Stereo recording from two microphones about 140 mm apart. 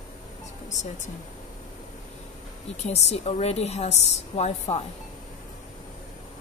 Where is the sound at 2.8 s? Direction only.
50° left (ahead or behind).